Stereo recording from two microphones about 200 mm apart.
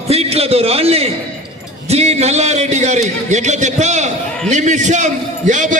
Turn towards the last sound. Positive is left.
turn(degrees=-40)  # may be behind; listen again after turning